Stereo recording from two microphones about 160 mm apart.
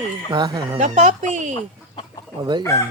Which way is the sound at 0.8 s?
50° right (ahead or behind).